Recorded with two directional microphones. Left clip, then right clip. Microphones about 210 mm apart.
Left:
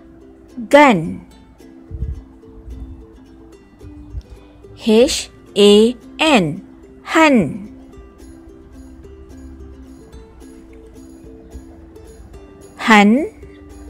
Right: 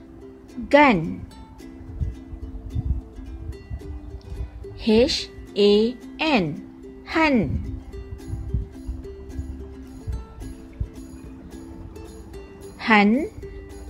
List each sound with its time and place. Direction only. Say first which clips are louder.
0.7 s speech: left 6 dB; 30° left (ahead or behind)
4.8 s speech: left 6 dB; 30° left (ahead or behind)
12.7 s speech: left 7 dB; 35° left (ahead or behind)